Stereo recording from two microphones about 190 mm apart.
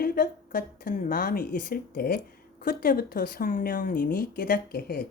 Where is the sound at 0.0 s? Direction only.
50° left (ahead or behind).